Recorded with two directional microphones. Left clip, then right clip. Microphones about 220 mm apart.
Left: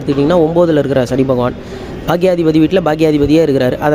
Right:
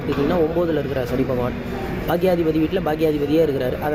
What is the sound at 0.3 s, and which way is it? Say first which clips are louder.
Speech: left 10 dB; 45° left (ahead or behind).